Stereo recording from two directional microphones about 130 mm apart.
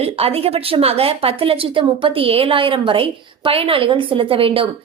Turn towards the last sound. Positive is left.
turn(degrees=-45)  # may be behind; listen again after turning